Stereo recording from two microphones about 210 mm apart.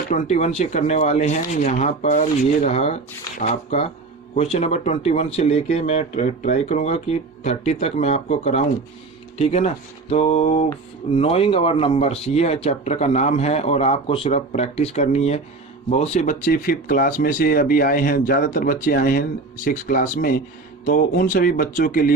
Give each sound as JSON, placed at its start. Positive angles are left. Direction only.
{"t": 0.1, "sound": "speech", "side_deg": 35}